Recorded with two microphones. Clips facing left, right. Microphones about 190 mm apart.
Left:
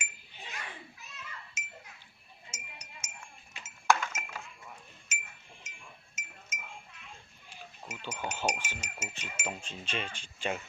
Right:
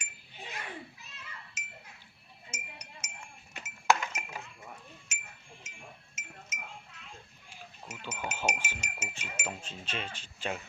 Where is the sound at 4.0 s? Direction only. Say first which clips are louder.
Even; 15° right (ahead or behind).